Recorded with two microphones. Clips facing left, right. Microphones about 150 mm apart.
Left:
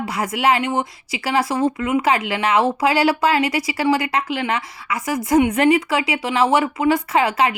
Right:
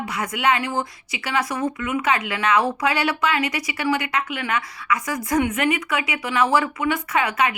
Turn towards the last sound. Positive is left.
turn(degrees=30)  # may be behind; listen again after turning